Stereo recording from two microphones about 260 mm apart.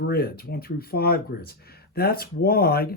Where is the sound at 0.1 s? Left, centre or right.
Left.